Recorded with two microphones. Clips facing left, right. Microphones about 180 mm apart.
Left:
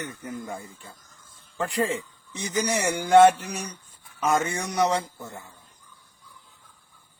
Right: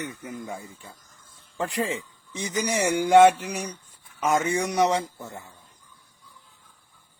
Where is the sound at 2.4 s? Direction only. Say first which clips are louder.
Right 1 dB; 15° right (ahead or behind).